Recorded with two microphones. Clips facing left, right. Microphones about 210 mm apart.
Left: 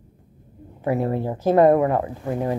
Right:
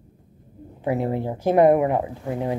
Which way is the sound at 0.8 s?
20° right (ahead or behind).